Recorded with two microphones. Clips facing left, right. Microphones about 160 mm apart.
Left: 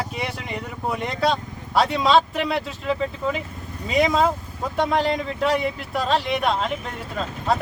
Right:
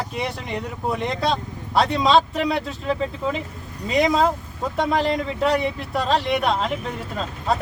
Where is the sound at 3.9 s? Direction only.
Centre (ahead or behind).